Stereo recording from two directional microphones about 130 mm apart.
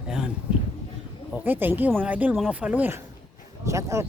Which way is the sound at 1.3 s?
15° right (ahead or behind).